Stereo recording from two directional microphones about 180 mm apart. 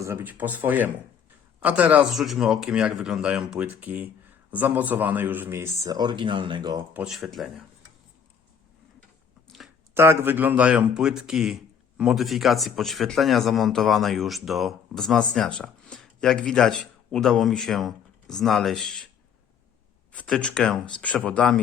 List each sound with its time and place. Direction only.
0.0 s a man's voice: 10° right (ahead or behind)
6.9 s a man's voice: 5° right (ahead or behind)
9.5 s a sound: centre (ahead or behind)
9.9 s a man's voice: 15° right (ahead or behind); by 19.0 s 5° left (ahead or behind)
20.1 s a man's voice: 5° left (ahead or behind)